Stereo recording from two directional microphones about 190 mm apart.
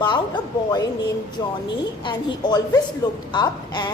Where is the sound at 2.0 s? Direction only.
20° left (ahead or behind).